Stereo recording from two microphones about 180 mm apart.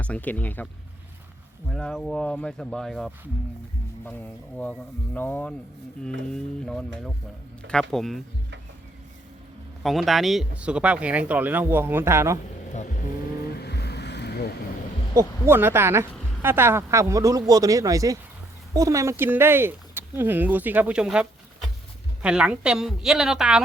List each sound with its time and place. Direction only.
0.0 s speech: 10° left (ahead or behind)
1.7 s a woman's voice: centre (ahead or behind)
9.8 s speech: centre (ahead or behind); by 12.4 s 15° right (ahead or behind)
13.6 s vehicle: 65° left (ahead or behind)
15.1 s a woman's voice: 15° right (ahead or behind)